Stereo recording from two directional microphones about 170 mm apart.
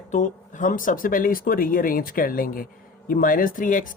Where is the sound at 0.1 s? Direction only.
50° left (ahead or behind).